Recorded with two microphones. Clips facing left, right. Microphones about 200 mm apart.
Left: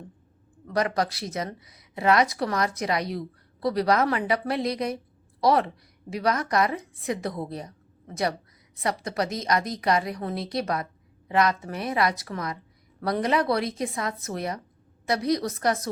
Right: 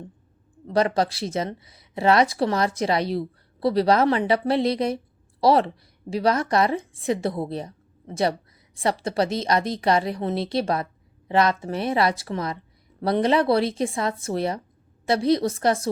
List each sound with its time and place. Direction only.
0.7 s a woman's voice: 30° right (ahead or behind)